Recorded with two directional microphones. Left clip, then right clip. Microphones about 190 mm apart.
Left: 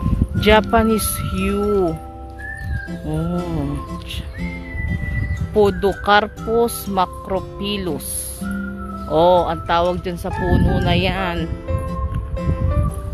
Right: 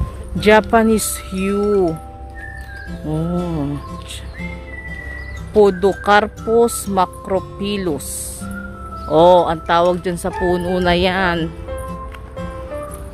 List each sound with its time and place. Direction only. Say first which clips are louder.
0.4 s speech: right 2 dB; 10° right (ahead or behind)
3.1 s speech: right 3 dB; 15° right (ahead or behind)
3.3 s music: right 2 dB; centre (ahead or behind)
5.5 s speech: right 3 dB; 15° right (ahead or behind)